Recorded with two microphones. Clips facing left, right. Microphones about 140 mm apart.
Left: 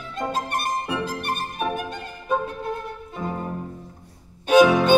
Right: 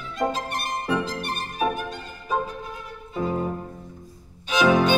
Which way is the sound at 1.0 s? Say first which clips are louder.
Left 2 dB; 50° left (ahead or behind).